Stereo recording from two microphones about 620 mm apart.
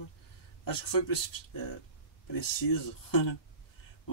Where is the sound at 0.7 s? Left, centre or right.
Left.